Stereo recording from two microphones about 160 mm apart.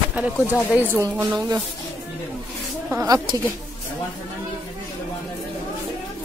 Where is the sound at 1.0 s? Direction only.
20° right (ahead or behind).